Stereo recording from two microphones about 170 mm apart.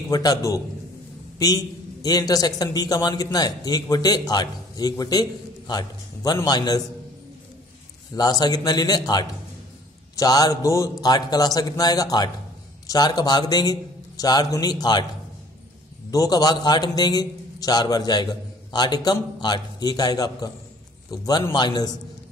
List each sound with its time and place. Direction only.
0.1 s a man's voice: 20° left (ahead or behind)
8.1 s a man's voice: 20° left (ahead or behind)
16.1 s a man's voice: 20° left (ahead or behind)